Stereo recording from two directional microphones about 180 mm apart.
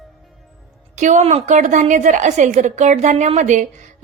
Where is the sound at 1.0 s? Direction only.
40° right (ahead or behind).